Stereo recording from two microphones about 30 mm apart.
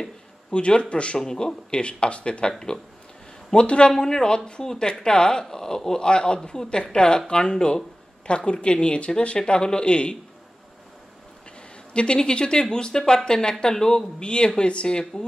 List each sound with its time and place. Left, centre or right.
0.5 s speech: left
1.2 s speech: left
3.5 s speech: left
3.9 s speech: left
9.4 s speech: left
11.9 s speech: left
14.2 s speech: left